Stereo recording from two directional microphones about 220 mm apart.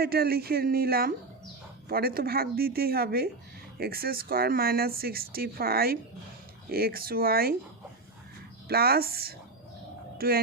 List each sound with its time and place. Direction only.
0.0 s speech: 45° right (ahead or behind)
8.6 s speech: 45° right (ahead or behind)